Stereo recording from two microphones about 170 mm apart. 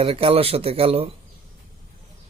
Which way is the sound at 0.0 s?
35° right (ahead or behind).